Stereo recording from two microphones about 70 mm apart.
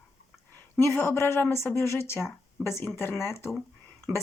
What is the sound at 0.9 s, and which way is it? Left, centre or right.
A woman's voice, left.